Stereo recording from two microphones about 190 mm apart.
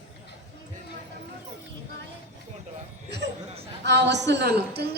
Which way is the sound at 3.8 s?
65° right (ahead or behind).